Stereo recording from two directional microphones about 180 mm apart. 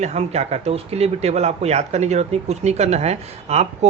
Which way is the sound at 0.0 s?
35° right (ahead or behind).